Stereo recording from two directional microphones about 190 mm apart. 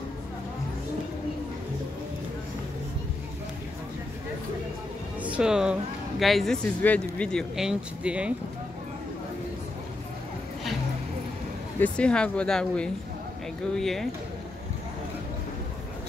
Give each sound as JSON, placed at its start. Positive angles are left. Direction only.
{"t": 5.2, "sound": "speech", "side_deg": -5}
{"t": 11.8, "sound": "speech", "side_deg": 5}